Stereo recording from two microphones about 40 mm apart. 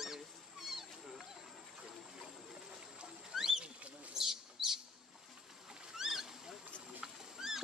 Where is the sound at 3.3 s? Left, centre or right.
Centre.